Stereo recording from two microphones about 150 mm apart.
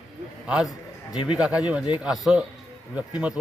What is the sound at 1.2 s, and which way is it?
A man's voice, 5° right (ahead or behind).